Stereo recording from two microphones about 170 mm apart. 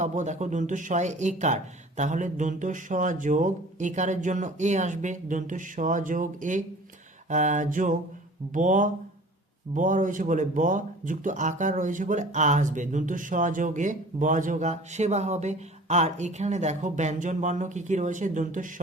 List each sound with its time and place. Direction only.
0.0 s speech: 45° right (ahead or behind)